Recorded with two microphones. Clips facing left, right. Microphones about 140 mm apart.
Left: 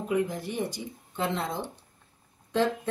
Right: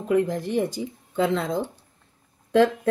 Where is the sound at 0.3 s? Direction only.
90° right.